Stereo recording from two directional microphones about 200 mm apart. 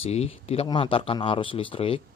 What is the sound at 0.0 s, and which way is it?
A man's voice, 30° left (ahead or behind).